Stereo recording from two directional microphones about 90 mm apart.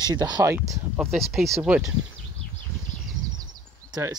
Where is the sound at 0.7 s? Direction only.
Centre (ahead or behind).